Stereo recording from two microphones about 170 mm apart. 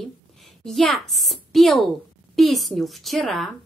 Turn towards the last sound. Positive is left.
turn(degrees=0)  # may be behind; listen again after turning